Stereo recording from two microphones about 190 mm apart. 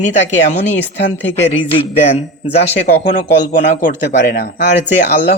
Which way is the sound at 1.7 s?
30° left (ahead or behind).